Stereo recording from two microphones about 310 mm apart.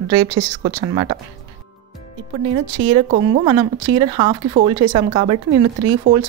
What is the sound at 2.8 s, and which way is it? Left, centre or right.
Speech, right.